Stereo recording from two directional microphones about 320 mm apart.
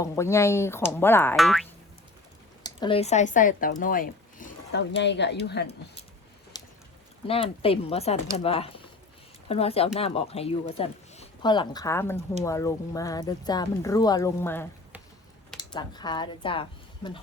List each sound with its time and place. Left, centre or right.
0.0 s speech: centre
2.6 s speech: centre; by 6.0 s left
6.5 s a sound: centre
7.3 s speech: centre